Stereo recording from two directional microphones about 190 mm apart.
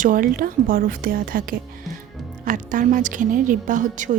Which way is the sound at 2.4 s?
45° right (ahead or behind).